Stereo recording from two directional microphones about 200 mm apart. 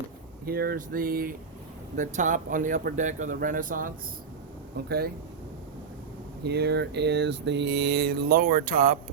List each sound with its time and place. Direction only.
0.4 s speech: 50° right (ahead or behind)
6.4 s mantra: 55° right (ahead or behind)